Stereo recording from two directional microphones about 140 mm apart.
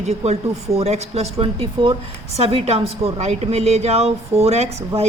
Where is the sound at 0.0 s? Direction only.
50° right (ahead or behind).